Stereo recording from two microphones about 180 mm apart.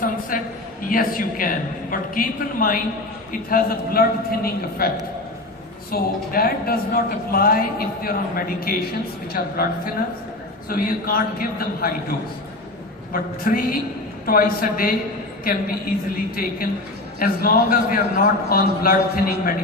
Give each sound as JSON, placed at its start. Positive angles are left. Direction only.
{"t": 0.3, "sound": "a man's voice", "side_deg": 50}
{"t": 5.9, "sound": "a man's voice", "side_deg": 55}
{"t": 13.1, "sound": "a man's voice", "side_deg": 50}